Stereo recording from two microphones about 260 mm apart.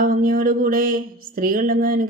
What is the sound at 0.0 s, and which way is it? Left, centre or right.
Speech, right.